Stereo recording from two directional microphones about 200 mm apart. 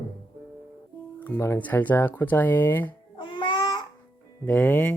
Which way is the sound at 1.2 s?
10° left (ahead or behind).